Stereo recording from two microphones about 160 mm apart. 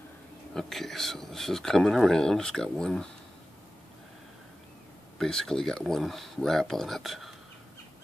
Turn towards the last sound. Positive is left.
turn(degrees=0)  # may be behind; listen again after turning